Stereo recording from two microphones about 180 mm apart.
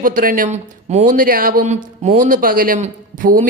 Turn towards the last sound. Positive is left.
turn(degrees=-45)  # may be behind; listen again after turning